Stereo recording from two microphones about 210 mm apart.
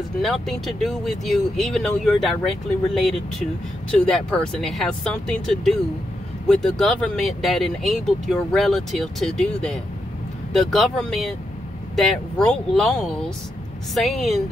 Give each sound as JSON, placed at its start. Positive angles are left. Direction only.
{"t": 0.2, "sound": "speech", "side_deg": 0}